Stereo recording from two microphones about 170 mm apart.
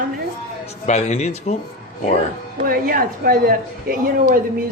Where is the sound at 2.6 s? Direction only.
55° right (ahead or behind).